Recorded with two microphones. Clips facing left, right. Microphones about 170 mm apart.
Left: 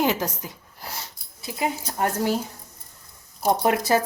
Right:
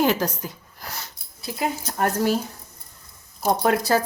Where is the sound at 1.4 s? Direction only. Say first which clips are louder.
Even; 15° left (ahead or behind).